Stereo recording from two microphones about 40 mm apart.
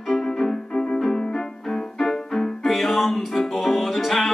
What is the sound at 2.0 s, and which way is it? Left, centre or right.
Music, centre.